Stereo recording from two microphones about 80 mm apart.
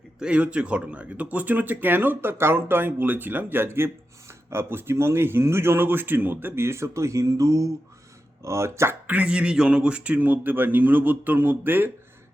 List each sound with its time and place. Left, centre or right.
0.2 s speech: centre; by 9.0 s right
9.0 s speech: centre